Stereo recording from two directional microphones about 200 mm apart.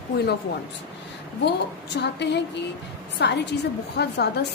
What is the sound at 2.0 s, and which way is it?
A woman's voice, 60° left (ahead or behind).